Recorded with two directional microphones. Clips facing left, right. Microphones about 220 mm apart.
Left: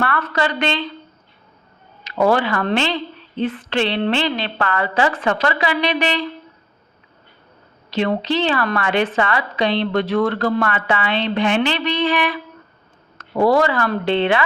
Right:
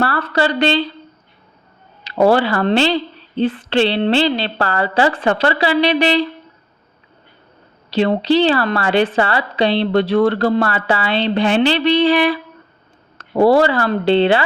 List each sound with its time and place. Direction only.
0.0 s a woman's voice: 30° right (ahead or behind)
2.0 s a woman's voice: 30° right (ahead or behind)
7.9 s a woman's voice: 35° right (ahead or behind)